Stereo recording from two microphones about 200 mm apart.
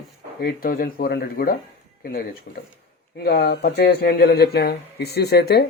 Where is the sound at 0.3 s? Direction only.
50° left (ahead or behind).